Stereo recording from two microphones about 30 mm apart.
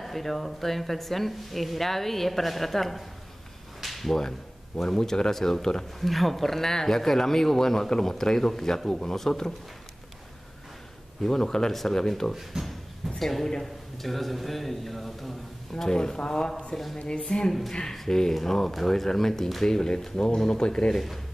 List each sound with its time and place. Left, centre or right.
0.0 s speech: centre
3.8 s a sound: centre
4.8 s speech: centre
5.9 s speech: centre
11.2 s speech: centre
12.6 s speech: right
13.2 s a man's voice: centre
15.7 s speech: left
17.9 s speech: centre
20.9 s a man's voice: centre